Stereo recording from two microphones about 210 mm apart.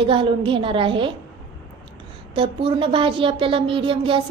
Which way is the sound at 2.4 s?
25° right (ahead or behind).